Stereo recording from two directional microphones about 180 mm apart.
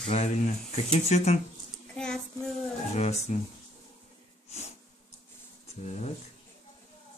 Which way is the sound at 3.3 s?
40° left (ahead or behind).